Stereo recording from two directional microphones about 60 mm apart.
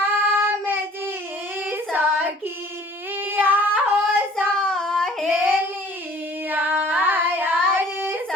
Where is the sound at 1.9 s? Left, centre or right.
Right.